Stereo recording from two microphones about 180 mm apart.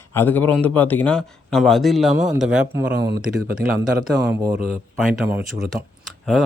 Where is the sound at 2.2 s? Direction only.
40° right (ahead or behind).